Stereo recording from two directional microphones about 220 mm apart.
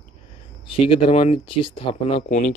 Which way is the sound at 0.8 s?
25° left (ahead or behind).